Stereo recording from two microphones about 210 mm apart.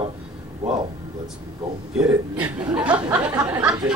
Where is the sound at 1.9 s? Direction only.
5° right (ahead or behind).